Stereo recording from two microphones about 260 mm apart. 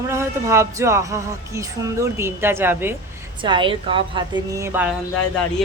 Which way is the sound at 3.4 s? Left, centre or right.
Centre.